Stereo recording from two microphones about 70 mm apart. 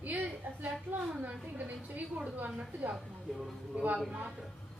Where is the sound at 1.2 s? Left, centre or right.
Right.